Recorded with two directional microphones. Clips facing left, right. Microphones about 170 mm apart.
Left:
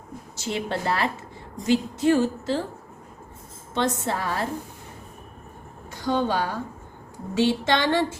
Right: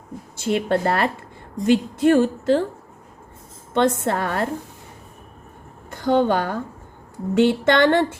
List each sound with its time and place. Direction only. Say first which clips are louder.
0.3 s a woman's voice: right 7 dB; 55° right (ahead or behind)
3.8 s a woman's voice: right 6 dB; 55° right (ahead or behind)
5.9 s a woman's voice: right 6 dB; 55° right (ahead or behind)